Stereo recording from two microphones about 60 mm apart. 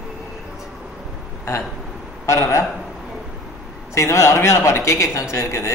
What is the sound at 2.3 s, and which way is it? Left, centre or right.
Mantra, left.